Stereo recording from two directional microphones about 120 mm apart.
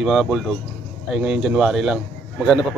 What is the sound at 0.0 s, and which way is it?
A man's voice, 5° right (ahead or behind).